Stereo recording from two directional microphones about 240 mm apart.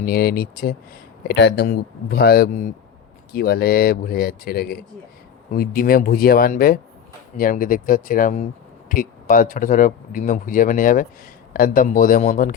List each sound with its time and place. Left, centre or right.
0.0 s speech: left